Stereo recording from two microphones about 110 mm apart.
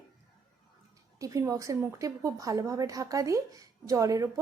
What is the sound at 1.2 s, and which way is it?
A woman's voice, 30° right (ahead or behind).